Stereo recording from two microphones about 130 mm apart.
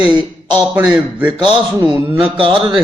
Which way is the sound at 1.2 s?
40° right (ahead or behind).